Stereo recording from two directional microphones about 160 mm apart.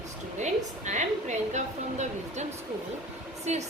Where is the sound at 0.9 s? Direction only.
45° right (ahead or behind).